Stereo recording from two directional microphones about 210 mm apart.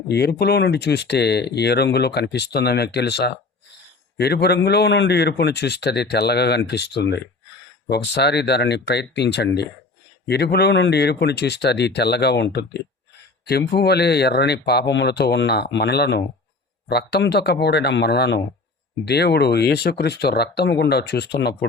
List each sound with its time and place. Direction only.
0.1 s speech: 50° left (ahead or behind)